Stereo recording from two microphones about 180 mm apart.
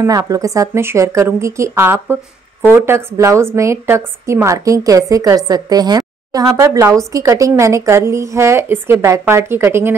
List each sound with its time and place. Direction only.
0.0 s a woman's voice: 20° right (ahead or behind)